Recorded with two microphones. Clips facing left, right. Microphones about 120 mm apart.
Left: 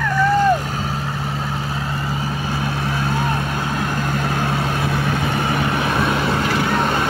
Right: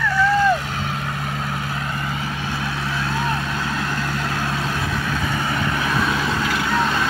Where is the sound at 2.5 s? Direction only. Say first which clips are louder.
Left 4 dB; 45° left (ahead or behind).